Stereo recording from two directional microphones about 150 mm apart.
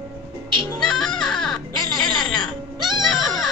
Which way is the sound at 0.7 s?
Centre (ahead or behind).